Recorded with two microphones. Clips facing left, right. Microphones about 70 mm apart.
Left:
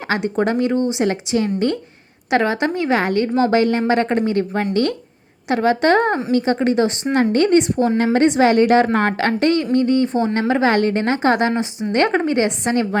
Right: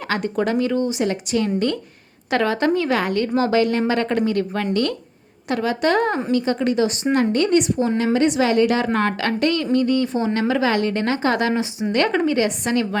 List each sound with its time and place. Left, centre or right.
0.1 s a woman's voice: left